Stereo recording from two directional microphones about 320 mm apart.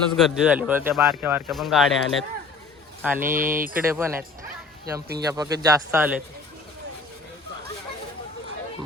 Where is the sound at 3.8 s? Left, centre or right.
Centre.